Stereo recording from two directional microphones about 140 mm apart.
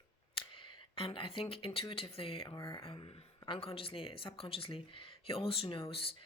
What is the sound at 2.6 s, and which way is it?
Speech, 20° left (ahead or behind).